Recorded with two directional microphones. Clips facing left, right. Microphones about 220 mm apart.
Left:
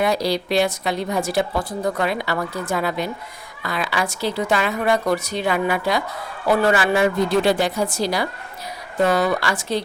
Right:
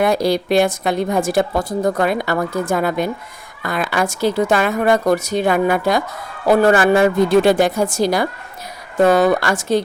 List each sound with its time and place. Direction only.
0.0 s a woman's voice: 50° right (ahead or behind)